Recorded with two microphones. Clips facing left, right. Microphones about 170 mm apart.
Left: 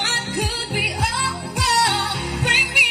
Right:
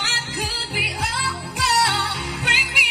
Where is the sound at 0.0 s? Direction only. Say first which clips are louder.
Left 4 dB; 50° left (ahead or behind).